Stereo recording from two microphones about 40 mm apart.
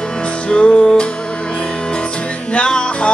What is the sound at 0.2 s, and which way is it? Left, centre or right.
Music, left.